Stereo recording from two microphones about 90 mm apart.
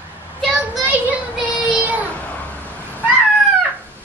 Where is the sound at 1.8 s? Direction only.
15° right (ahead or behind).